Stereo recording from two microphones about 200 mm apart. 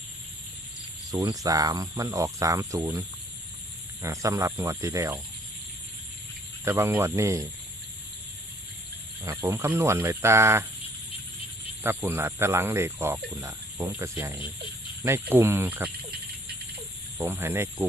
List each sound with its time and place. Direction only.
1.1 s speech: 20° right (ahead or behind)
4.0 s speech: 15° right (ahead or behind)
6.7 s speech: 15° right (ahead or behind)
9.2 s speech: 15° right (ahead or behind)
11.8 s speech: 10° right (ahead or behind)
17.2 s speech: 10° right (ahead or behind)